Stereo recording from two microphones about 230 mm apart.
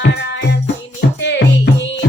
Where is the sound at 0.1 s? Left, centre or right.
Left.